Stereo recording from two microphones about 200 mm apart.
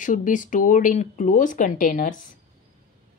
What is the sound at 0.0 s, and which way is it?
Speech, 40° left (ahead or behind).